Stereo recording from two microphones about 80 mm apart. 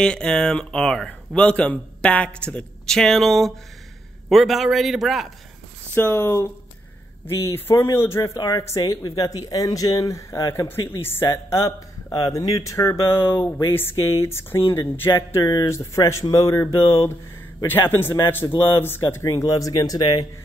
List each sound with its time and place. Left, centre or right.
0.0 s a man's voice: centre
5.9 s speech: left
8.4 s speech: left
17.6 s speech: left
19.2 s speech: left